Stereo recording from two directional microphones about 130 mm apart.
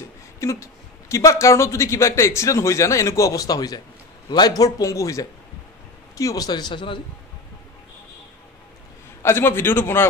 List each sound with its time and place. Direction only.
0.4 s a man's voice: 20° left (ahead or behind); by 7.0 s 40° left (ahead or behind)
9.2 s a man's voice: 20° left (ahead or behind)